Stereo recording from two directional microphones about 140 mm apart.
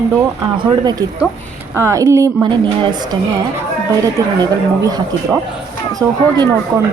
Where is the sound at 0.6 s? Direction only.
30° right (ahead or behind).